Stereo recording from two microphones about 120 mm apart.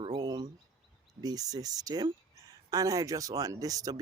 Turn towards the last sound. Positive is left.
turn(degrees=-30)  # may be behind; listen again after turning